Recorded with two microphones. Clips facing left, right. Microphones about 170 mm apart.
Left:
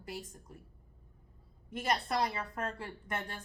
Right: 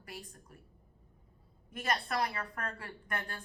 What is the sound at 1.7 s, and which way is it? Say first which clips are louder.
A woman's voice: left 2 dB; 25° left (ahead or behind).